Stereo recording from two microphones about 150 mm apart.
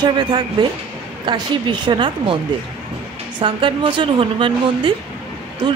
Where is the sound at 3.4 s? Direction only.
35° right (ahead or behind).